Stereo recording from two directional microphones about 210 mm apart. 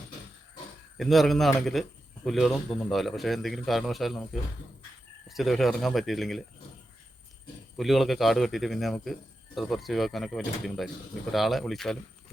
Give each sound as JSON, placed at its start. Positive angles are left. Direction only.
{"t": 0.9, "sound": "a man's voice", "side_deg": 0}
{"t": 5.3, "sound": "a man's voice", "side_deg": 0}
{"t": 7.8, "sound": "a man's voice", "side_deg": 0}